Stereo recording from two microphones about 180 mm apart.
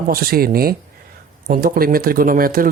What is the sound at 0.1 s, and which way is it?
Speech, 55° right (ahead or behind).